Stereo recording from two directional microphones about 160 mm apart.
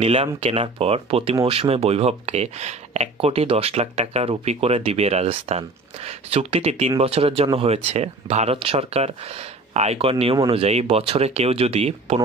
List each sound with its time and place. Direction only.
0.0 s speech: 40° right (ahead or behind)